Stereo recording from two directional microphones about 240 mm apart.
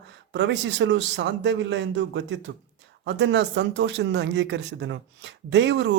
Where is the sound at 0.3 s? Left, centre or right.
Right.